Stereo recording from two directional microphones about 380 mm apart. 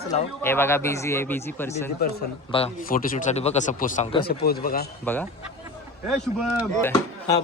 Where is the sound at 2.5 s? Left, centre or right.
Centre.